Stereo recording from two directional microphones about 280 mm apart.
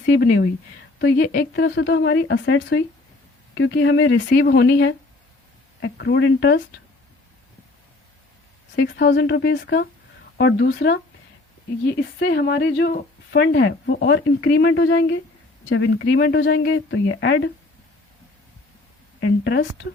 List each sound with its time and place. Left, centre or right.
0.0 s speech: left
8.7 s speech: left
12.2 s speech: left
19.2 s speech: left